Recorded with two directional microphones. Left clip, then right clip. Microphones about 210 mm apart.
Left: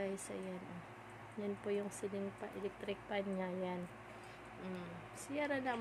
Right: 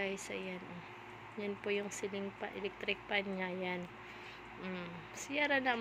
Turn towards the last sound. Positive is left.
turn(degrees=5)  # may be behind; listen again after turning